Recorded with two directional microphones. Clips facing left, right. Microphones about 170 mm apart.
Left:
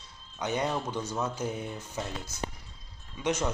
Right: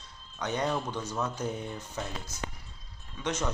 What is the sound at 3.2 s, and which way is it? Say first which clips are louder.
Speech: left 4 dB; 10° left (ahead or behind).